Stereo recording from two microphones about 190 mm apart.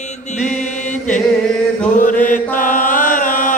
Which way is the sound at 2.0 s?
45° left (ahead or behind).